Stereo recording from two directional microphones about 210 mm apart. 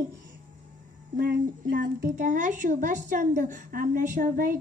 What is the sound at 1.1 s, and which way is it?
A woman's voice, 40° right (ahead or behind).